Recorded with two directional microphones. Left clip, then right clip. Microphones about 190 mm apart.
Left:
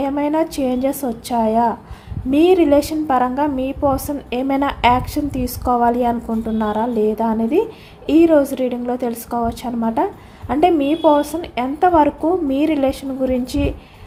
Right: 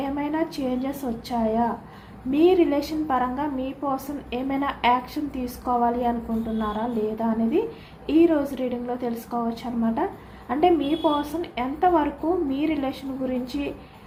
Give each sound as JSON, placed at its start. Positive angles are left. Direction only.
{"t": 0.0, "sound": "a woman's voice", "side_deg": 60}
{"t": 10.5, "sound": "a woman's voice", "side_deg": 55}